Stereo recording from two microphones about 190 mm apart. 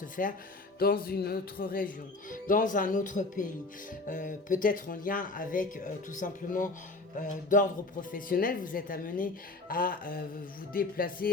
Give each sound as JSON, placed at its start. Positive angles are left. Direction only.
{"t": 0.0, "sound": "speech", "side_deg": 45}